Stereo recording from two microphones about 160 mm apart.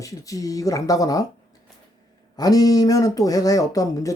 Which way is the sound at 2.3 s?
25° left (ahead or behind).